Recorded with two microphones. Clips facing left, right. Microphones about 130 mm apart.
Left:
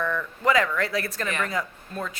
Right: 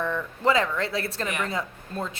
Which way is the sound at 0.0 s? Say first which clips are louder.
Even; 30° right (ahead or behind).